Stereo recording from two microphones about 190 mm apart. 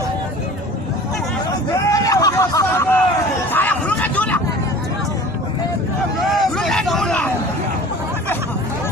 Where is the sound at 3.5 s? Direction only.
10° left (ahead or behind).